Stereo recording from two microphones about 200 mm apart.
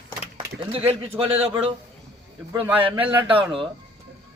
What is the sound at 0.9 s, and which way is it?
Speech, 30° right (ahead or behind).